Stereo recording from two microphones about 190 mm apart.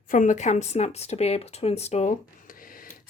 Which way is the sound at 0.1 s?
40° left (ahead or behind).